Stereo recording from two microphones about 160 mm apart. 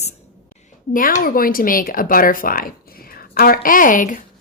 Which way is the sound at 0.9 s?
60° left (ahead or behind).